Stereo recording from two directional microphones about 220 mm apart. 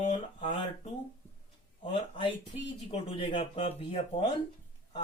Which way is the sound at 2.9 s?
25° left (ahead or behind).